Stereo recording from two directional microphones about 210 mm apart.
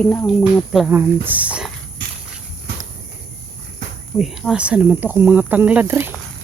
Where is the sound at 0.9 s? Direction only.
10° right (ahead or behind).